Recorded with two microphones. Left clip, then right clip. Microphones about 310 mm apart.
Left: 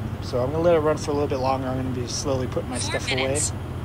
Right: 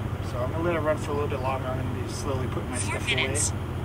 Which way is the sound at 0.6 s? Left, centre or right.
Centre.